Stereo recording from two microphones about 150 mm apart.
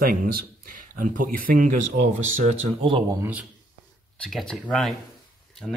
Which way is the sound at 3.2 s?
10° right (ahead or behind).